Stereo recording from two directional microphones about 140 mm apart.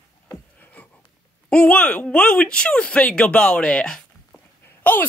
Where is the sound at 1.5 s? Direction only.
10° left (ahead or behind).